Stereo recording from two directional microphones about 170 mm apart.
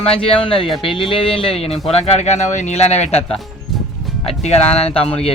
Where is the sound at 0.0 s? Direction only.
35° left (ahead or behind).